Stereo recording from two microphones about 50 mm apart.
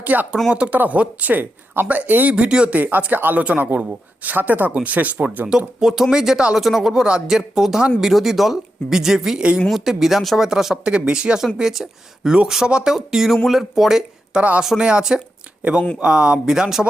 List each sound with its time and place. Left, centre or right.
0.0 s speech: right
2.3 s speech: centre
2.7 s speech: right
5.5 s speech: centre